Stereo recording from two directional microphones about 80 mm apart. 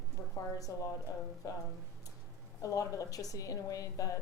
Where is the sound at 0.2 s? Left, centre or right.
Left.